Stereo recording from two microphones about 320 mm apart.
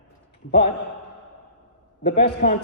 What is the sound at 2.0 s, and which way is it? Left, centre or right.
Speech, left.